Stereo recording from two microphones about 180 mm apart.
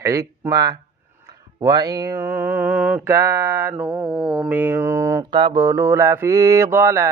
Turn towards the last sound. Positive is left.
turn(degrees=-15)  # may be behind; listen again after turning